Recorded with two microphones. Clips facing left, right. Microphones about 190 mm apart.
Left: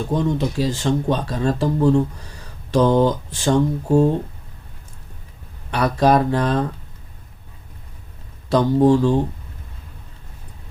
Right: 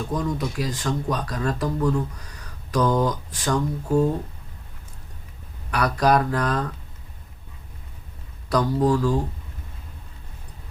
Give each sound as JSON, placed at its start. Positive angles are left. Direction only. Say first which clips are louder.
{"t": 0.1, "sound": "speech", "louder": "left 7 dB", "side_deg": 25}
{"t": 5.7, "sound": "speech", "louder": "left 4 dB", "side_deg": 25}
{"t": 8.4, "sound": "speech", "louder": "left 6 dB", "side_deg": 25}